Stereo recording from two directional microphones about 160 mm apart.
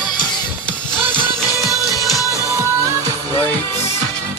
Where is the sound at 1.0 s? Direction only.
25° left (ahead or behind).